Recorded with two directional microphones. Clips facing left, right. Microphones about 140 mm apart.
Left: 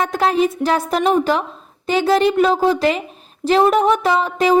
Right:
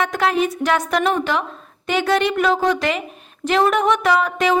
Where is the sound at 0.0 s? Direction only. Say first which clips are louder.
Left 2 dB; 35° left (ahead or behind).